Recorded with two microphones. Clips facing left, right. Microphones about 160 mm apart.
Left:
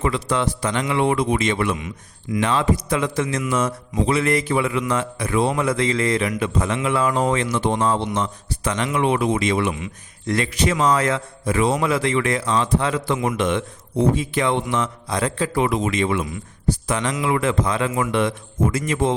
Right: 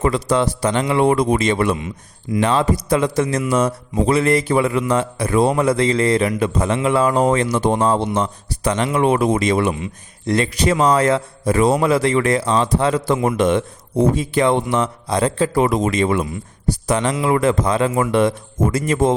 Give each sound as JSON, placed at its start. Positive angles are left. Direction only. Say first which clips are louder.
{"t": 0.0, "sound": "a man's voice", "louder": "right 4 dB", "side_deg": -40}